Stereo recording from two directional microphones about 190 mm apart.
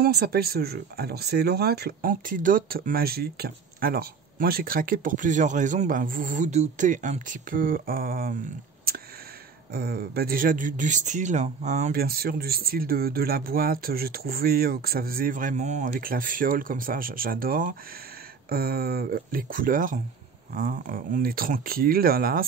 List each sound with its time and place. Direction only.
0.0 s speech: 55° right (ahead or behind)
9.7 s speech: 55° right (ahead or behind)